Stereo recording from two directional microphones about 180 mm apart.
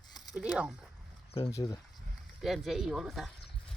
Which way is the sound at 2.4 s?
Centre (ahead or behind).